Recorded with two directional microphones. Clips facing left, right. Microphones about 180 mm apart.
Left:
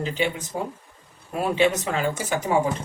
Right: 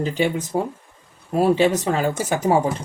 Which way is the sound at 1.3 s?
35° right (ahead or behind).